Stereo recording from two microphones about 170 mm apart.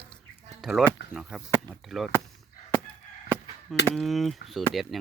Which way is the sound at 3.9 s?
Centre (ahead or behind).